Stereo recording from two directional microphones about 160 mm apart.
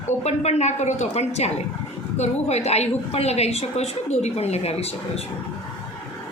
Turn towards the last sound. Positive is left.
turn(degrees=40)  # may be behind; listen again after turning